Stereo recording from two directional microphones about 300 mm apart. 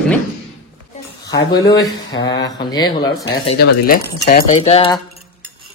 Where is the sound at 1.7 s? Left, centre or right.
Centre.